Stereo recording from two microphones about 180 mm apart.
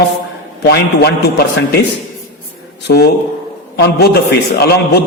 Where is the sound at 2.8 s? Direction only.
60° left (ahead or behind).